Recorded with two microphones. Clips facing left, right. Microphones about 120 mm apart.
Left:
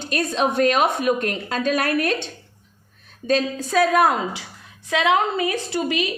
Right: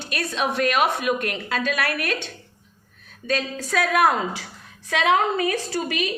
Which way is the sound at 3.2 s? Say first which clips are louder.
Left 5 dB; 40° left (ahead or behind).